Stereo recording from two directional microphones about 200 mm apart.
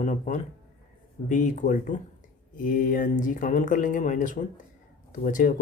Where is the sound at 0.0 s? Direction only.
40° left (ahead or behind).